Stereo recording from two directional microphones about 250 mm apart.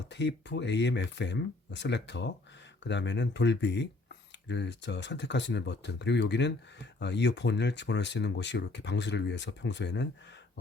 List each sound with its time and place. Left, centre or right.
0.1 s speech: left